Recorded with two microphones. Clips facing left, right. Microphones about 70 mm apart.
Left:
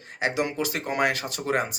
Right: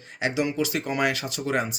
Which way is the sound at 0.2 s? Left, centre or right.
Left.